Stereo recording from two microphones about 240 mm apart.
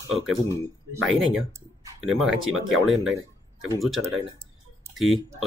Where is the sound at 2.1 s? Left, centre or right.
Centre.